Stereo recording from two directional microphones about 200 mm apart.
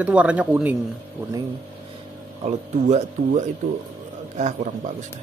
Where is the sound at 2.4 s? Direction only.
35° right (ahead or behind).